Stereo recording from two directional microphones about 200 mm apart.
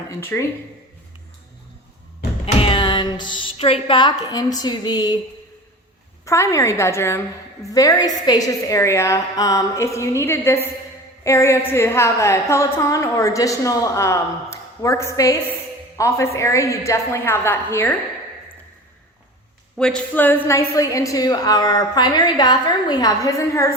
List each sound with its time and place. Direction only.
0.2 s a woman's voice: 10° left (ahead or behind)
2.6 s a woman's voice: 25° left (ahead or behind)
6.2 s a woman's voice: 15° left (ahead or behind)
19.7 s a woman's voice: 5° left (ahead or behind)